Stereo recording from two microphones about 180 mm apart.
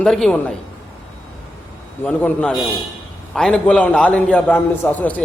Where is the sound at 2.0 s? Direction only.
10° left (ahead or behind).